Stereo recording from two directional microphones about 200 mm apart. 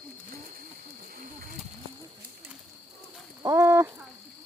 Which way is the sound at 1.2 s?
45° right (ahead or behind).